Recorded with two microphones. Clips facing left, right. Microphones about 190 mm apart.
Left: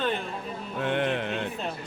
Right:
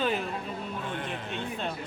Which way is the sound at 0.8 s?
75° left (ahead or behind).